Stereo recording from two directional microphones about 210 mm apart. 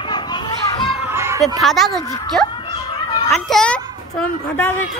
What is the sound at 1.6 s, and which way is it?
A child's voice, centre (ahead or behind).